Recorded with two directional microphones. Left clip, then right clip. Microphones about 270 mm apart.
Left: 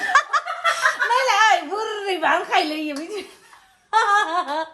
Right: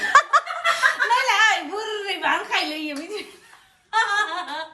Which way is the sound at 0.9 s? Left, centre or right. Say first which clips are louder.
Left 1 dB; centre.